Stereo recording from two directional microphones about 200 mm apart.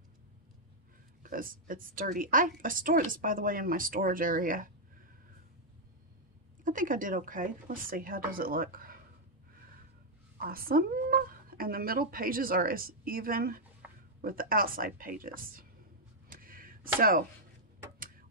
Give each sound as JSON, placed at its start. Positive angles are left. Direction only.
{"t": 1.2, "sound": "a woman's voice", "side_deg": -45}
{"t": 6.6, "sound": "a woman's voice", "side_deg": -40}
{"t": 10.3, "sound": "a woman's voice", "side_deg": -45}
{"t": 16.3, "sound": "a sound", "side_deg": -45}